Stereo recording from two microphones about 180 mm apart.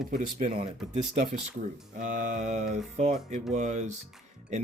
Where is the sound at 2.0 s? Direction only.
45° right (ahead or behind).